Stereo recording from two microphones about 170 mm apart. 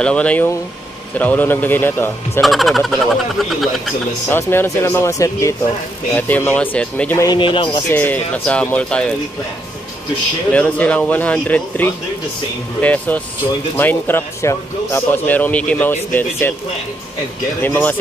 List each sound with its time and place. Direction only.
0.0 s speech: 5° left (ahead or behind)
2.4 s speech: centre (ahead or behind)
4.3 s speech: 15° left (ahead or behind)
7.2 s a man's voice: 25° left (ahead or behind)
7.9 s speech: 10° left (ahead or behind)
10.5 s speech: 5° left (ahead or behind)
17.6 s speech: 10° left (ahead or behind)